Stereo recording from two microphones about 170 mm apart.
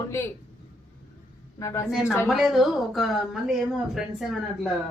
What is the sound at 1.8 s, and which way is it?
Speech, 5° right (ahead or behind).